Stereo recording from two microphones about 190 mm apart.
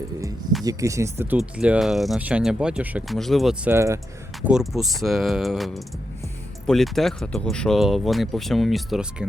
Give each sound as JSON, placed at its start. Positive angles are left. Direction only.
{"t": 0.6, "sound": "speech", "side_deg": -20}
{"t": 3.7, "sound": "speech", "side_deg": -15}
{"t": 4.4, "sound": "speech", "side_deg": 0}